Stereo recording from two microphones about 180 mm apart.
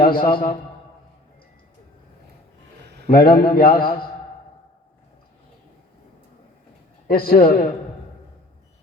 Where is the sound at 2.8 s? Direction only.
65° right (ahead or behind).